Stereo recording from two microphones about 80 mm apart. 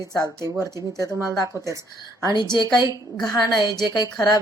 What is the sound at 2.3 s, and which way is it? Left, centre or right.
Speech, left.